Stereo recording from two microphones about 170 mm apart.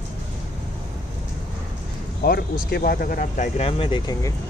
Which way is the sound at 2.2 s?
65° left (ahead or behind).